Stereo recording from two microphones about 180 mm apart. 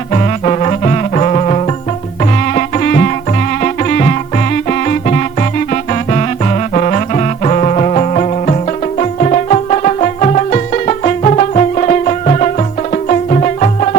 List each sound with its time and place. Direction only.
0.1 s music: 35° left (ahead or behind)
2.6 s music: 50° left (ahead or behind)